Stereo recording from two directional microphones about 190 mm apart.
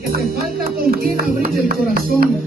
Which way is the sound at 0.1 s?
50° right (ahead or behind).